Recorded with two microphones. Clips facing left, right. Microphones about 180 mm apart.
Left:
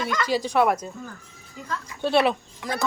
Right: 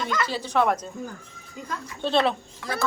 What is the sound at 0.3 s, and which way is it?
Speech, 15° left (ahead or behind).